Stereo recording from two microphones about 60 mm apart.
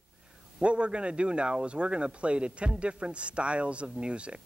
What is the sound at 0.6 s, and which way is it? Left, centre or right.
Speech, centre.